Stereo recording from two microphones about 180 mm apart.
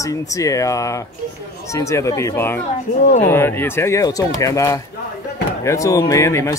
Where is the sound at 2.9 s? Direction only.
45° left (ahead or behind).